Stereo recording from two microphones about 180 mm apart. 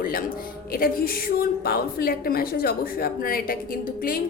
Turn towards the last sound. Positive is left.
turn(degrees=55)  # may be behind; listen again after turning